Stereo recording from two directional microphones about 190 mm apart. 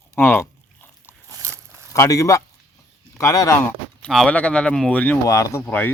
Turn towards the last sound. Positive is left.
turn(degrees=10)  # may be behind; listen again after turning